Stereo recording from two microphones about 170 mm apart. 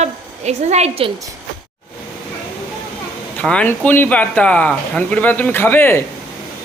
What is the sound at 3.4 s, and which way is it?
Speech, 10° left (ahead or behind).